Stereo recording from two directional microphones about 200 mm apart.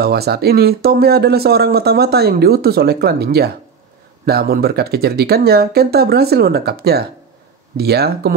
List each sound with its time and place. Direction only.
0.0 s speech: 55° right (ahead or behind)